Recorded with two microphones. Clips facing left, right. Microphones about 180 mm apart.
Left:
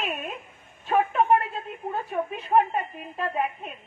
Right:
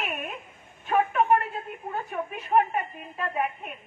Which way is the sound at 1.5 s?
30° left (ahead or behind).